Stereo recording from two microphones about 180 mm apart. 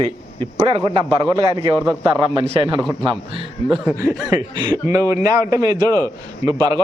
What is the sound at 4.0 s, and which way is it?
A man's voice, 15° right (ahead or behind).